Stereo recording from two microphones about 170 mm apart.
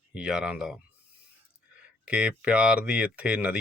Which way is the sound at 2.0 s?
5° right (ahead or behind).